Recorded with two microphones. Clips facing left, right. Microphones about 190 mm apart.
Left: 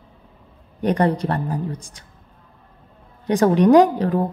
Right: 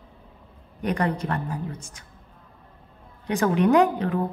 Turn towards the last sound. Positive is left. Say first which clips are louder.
# left 6 dB
turn(degrees=35)  # may be behind; listen again after turning